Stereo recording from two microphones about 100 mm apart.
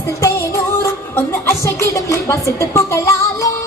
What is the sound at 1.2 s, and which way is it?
Music, 25° left (ahead or behind).